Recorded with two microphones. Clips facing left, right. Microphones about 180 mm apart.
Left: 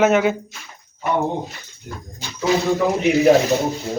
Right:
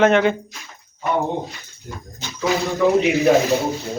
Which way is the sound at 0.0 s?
5° left (ahead or behind).